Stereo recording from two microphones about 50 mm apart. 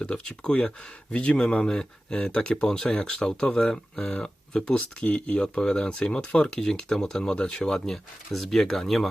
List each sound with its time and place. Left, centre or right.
0.0 s speech: centre
8.3 s speech: centre